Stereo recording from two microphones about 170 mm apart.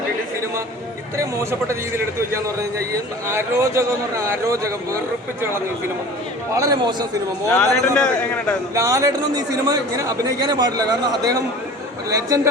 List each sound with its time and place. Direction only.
1.1 s a man's voice: 15° right (ahead or behind)
6.6 s a man's voice: 20° right (ahead or behind)
7.5 s a man's voice: 5° left (ahead or behind)
8.7 s a man's voice: 20° right (ahead or behind)